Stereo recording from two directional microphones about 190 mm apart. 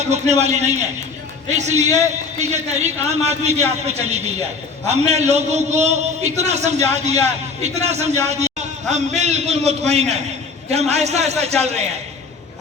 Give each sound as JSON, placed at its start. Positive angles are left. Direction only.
{"t": 0.0, "sound": "a man's voice", "side_deg": -35}